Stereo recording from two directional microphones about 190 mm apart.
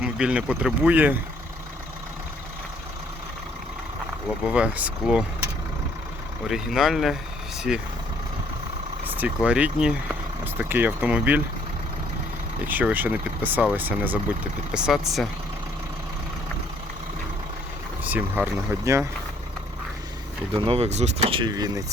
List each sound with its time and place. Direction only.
0.0 s speech: 5° right (ahead or behind)
4.4 s speech: 5° right (ahead or behind)
6.5 s speech: centre (ahead or behind)
9.0 s speech: 10° right (ahead or behind)
12.6 s speech: 10° right (ahead or behind)
18.0 s speech: 10° right (ahead or behind)
20.5 s speech: 30° right (ahead or behind)